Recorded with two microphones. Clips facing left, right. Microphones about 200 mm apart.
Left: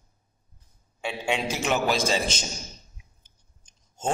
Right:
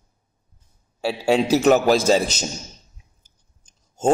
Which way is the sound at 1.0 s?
35° right (ahead or behind).